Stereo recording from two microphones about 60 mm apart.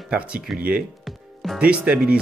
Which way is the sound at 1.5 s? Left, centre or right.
Centre.